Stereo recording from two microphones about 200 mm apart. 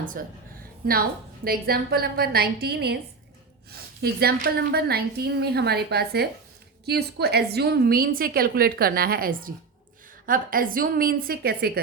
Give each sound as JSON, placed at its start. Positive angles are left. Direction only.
{"t": 0.2, "sound": "a woman's voice", "side_deg": -45}